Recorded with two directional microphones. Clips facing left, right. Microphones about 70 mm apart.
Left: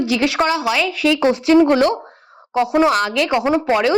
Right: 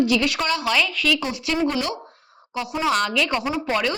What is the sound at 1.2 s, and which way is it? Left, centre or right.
Speech, left.